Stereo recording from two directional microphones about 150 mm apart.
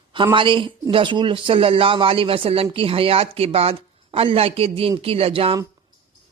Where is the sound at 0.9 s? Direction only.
35° right (ahead or behind).